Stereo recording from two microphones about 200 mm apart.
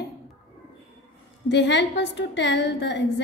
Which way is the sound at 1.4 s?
60° left (ahead or behind).